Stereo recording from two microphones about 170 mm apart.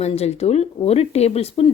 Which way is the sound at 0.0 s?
40° left (ahead or behind).